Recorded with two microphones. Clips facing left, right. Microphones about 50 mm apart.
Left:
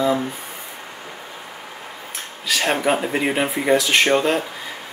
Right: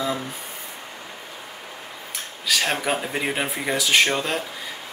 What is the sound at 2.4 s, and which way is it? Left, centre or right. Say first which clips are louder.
Speech: left 4 dB; centre.